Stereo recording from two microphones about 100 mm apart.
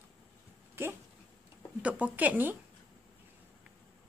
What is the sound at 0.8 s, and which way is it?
Dog, 25° right (ahead or behind).